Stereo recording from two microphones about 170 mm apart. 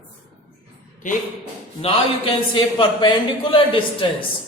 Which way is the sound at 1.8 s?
30° left (ahead or behind).